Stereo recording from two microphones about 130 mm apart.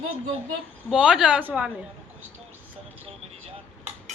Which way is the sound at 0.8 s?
5° right (ahead or behind).